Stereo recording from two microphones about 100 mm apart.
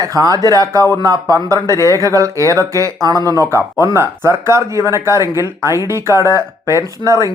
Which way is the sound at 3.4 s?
25° right (ahead or behind).